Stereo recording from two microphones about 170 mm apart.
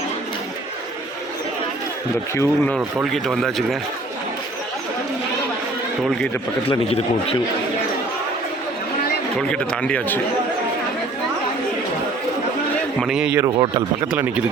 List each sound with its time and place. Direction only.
2.3 s a man's voice: 15° left (ahead or behind)
2.7 s speech: centre (ahead or behind)
6.1 s speech: 5° left (ahead or behind)
6.7 s a man's voice: 35° left (ahead or behind)
9.5 s a man's voice: 5° left (ahead or behind)
13.0 s speech: 5° right (ahead or behind)
13.6 s speech: 25° right (ahead or behind)
14.1 s speech: 10° right (ahead or behind)